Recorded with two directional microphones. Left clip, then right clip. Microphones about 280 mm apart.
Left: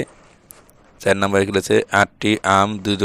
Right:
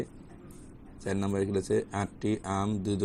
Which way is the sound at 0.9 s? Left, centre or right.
Left.